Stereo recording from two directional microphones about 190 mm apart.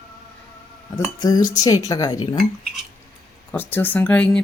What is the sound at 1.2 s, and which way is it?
Speech, 20° left (ahead or behind).